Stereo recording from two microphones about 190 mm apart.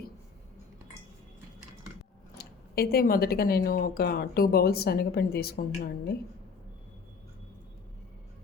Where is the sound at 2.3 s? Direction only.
55° left (ahead or behind).